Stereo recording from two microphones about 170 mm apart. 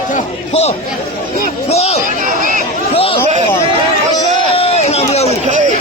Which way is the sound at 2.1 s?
50° right (ahead or behind).